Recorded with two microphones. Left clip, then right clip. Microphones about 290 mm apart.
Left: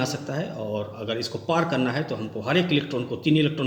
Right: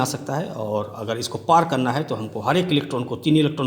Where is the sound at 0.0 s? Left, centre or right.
Right.